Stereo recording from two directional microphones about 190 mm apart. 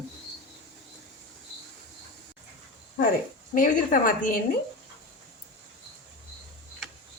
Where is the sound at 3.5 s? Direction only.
45° left (ahead or behind).